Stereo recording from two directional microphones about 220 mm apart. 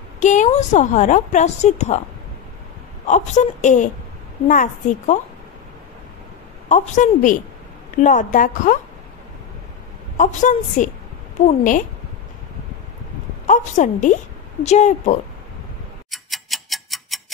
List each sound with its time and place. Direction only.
0.2 s a woman's voice: 35° left (ahead or behind)
3.1 s a woman's voice: 35° left (ahead or behind)
6.7 s a woman's voice: 35° left (ahead or behind)
10.1 s a woman's voice: 35° left (ahead or behind)
13.5 s a woman's voice: 35° left (ahead or behind)
16.1 s tick-tock: centre (ahead or behind)